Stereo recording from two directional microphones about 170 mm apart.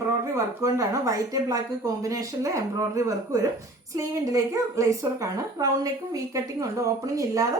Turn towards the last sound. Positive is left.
turn(degrees=-20)  # may be behind; listen again after turning